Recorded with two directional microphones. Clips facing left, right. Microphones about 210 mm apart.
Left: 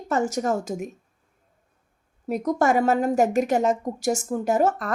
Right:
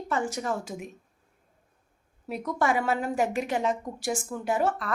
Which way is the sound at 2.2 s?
45° left (ahead or behind).